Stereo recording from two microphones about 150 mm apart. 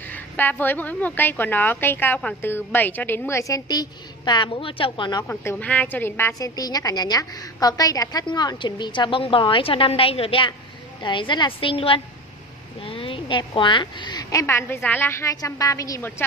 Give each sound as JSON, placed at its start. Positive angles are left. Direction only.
{"t": 0.1, "sound": "a woman's voice", "side_deg": 10}
{"t": 5.3, "sound": "a woman's voice", "side_deg": 15}
{"t": 14.4, "sound": "a woman's voice", "side_deg": 15}